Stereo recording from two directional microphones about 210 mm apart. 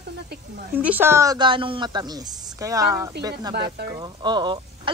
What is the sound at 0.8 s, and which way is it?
A woman's voice, 10° right (ahead or behind).